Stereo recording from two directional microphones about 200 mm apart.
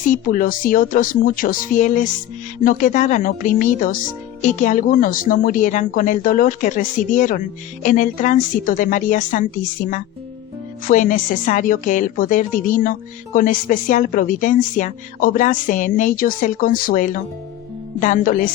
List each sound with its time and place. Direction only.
0.1 s a woman's voice: 45° left (ahead or behind)
10.8 s a woman's voice: 40° left (ahead or behind)